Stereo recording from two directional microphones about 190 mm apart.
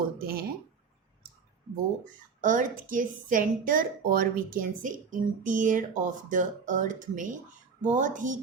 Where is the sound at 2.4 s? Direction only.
45° right (ahead or behind).